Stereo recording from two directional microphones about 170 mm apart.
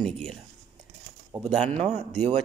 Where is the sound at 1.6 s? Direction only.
40° right (ahead or behind).